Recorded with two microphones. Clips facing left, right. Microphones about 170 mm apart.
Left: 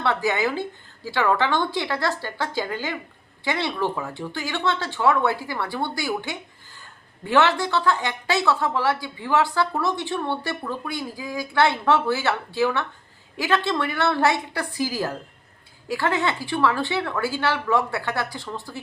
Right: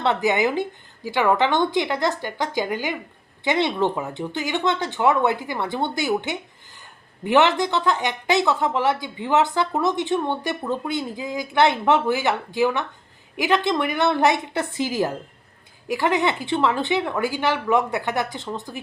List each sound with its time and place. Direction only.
0.0 s speech: 20° right (ahead or behind)